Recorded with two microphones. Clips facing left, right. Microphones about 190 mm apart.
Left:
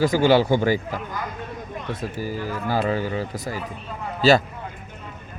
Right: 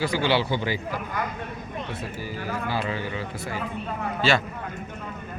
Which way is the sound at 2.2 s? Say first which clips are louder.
Left 3 dB; 45° left (ahead or behind).